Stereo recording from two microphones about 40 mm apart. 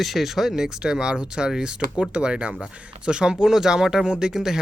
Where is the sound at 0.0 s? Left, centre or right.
Centre.